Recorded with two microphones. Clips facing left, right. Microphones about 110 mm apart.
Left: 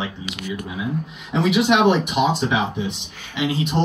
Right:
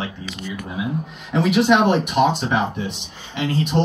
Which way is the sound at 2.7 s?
55° right (ahead or behind).